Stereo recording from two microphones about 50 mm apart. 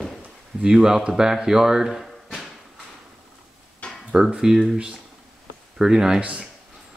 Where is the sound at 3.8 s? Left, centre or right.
Left.